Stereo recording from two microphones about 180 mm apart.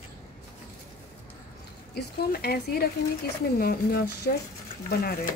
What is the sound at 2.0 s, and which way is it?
Speech, 60° left (ahead or behind).